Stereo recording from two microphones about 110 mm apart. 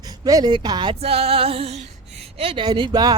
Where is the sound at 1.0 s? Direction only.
65° right (ahead or behind).